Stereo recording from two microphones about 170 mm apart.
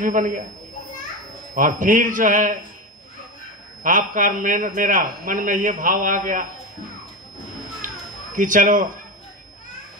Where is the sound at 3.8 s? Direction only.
50° right (ahead or behind).